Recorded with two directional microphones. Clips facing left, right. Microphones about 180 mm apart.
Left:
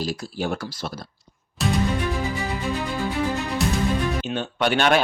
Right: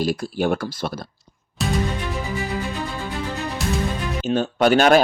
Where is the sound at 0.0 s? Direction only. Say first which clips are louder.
Right 5 dB; 55° right (ahead or behind).